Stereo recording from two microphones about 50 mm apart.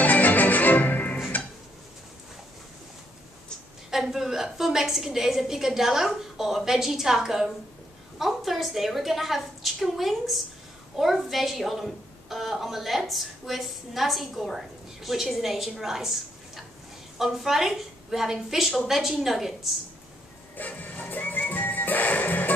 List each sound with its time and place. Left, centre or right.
0.0 s music: left
3.9 s a woman's voice: centre
20.5 s music: left